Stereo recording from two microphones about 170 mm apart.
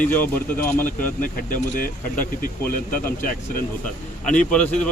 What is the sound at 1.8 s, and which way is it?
Speech, 55° left (ahead or behind).